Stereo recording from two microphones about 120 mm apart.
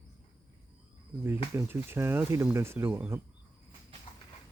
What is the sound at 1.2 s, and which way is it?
Speech, 20° right (ahead or behind).